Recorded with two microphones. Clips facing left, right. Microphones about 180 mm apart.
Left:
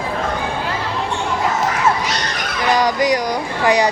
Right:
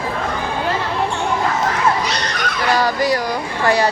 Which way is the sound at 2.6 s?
15° left (ahead or behind).